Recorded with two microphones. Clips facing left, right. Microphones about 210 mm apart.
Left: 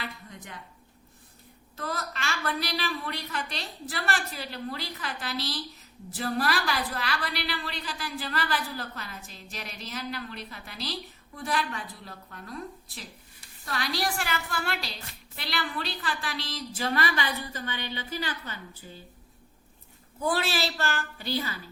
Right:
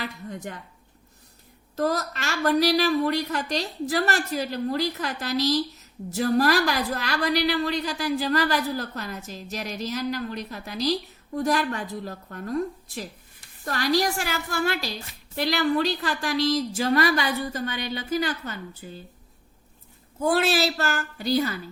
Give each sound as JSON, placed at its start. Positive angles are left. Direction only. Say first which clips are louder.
{"t": 0.3, "sound": "a woman's voice", "louder": "right 11 dB", "side_deg": -45}
{"t": 1.7, "sound": "a woman's voice", "louder": "right 10 dB", "side_deg": -40}
{"t": 20.2, "sound": "a woman's voice", "louder": "right 6 dB", "side_deg": -45}